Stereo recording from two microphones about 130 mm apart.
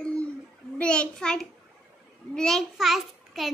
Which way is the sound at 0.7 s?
10° left (ahead or behind).